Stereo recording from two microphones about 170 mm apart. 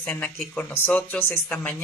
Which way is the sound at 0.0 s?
10° left (ahead or behind).